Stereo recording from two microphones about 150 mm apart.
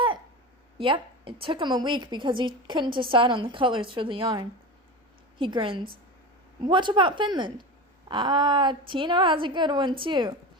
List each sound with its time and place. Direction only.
0.8 s a woman's voice: 35° right (ahead or behind)